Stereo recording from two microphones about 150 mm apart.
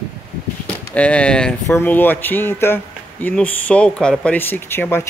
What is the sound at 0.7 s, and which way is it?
Speech, 10° left (ahead or behind).